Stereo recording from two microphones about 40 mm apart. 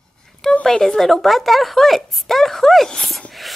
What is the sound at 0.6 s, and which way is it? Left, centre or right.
A woman's voice, centre.